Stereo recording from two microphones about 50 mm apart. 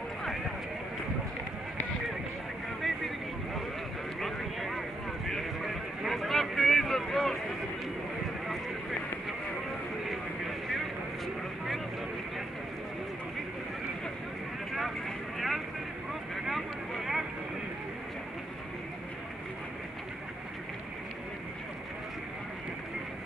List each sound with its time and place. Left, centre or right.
4.2 s vehicle: centre
5.3 s a sound: centre
10.0 s vehicle: centre
14.7 s vehicle: centre